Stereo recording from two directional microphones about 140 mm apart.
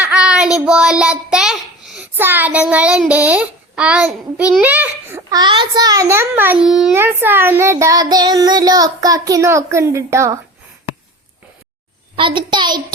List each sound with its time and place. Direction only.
0.0 s child singing: 5° right (ahead or behind)
2.1 s child singing: 15° right (ahead or behind)
5.3 s child singing: 30° right (ahead or behind); by 6.9 s 5° right (ahead or behind)
6.9 s child singing: 15° right (ahead or behind)
12.1 s a child's voice: 35° right (ahead or behind)